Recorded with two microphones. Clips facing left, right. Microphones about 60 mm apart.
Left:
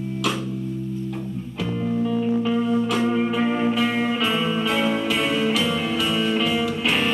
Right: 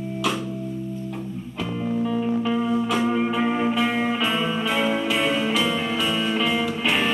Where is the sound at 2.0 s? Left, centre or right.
Right.